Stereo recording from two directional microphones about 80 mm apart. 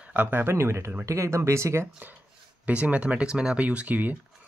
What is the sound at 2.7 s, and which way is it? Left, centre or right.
Speech, centre.